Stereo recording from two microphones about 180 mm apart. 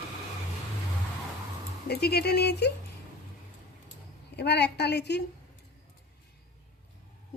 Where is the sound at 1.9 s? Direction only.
60° left (ahead or behind).